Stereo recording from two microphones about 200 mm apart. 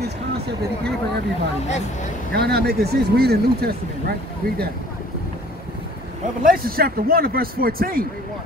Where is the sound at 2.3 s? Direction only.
55° right (ahead or behind).